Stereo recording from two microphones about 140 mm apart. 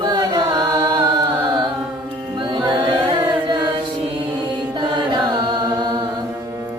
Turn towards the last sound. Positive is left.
turn(degrees=-30)  # may be behind; listen again after turning